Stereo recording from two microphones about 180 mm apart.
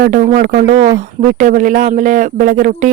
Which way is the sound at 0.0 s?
50° right (ahead or behind).